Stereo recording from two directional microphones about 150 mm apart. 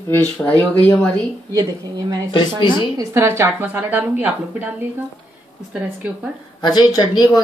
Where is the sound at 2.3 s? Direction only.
30° left (ahead or behind).